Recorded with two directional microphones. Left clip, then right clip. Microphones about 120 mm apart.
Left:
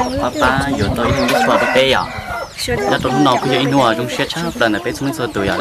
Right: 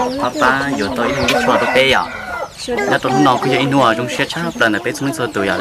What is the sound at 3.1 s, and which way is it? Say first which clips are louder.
Speech: right 1 dB; 5° right (ahead or behind).